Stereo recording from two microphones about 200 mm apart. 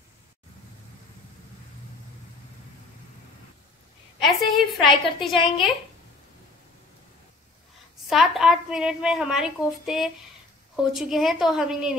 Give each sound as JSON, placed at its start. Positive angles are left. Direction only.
{"t": 4.2, "sound": "a woman's voice", "side_deg": 0}
{"t": 8.1, "sound": "a woman's voice", "side_deg": 0}